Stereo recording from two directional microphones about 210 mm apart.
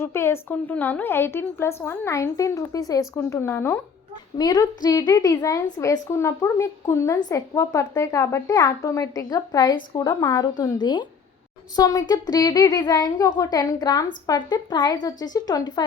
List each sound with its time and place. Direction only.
0.0 s speech: 10° left (ahead or behind)